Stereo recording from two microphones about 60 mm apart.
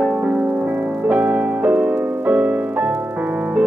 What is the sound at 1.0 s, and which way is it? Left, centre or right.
Music, right.